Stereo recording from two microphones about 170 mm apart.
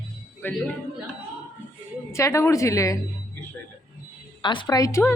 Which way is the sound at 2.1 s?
15° left (ahead or behind).